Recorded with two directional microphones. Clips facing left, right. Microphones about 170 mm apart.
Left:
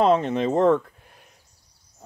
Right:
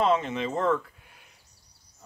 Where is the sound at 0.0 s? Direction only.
40° left (ahead or behind).